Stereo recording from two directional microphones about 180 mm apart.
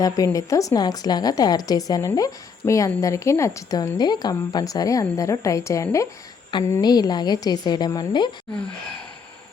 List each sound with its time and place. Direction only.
0.3 s a woman's voice: 20° left (ahead or behind)